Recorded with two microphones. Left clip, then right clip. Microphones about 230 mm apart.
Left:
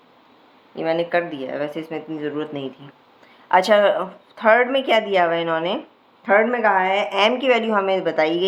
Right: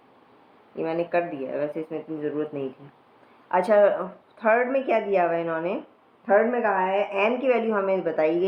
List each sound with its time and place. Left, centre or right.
0.8 s a woman's voice: left
3.5 s a woman's voice: left